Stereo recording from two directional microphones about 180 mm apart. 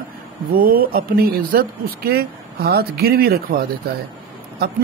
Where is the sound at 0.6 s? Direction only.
55° right (ahead or behind).